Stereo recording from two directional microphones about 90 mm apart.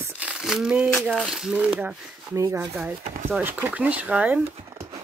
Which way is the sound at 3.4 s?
20° right (ahead or behind).